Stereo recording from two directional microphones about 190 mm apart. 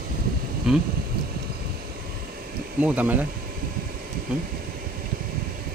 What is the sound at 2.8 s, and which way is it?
Speech, 10° right (ahead or behind).